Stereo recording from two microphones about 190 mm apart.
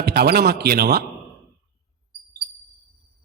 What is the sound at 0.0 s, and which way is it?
Speech, 55° right (ahead or behind).